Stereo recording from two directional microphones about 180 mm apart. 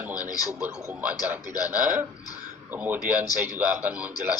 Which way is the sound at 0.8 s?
10° right (ahead or behind).